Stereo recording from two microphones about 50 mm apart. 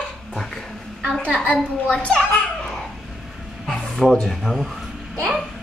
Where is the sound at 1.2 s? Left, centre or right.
Left.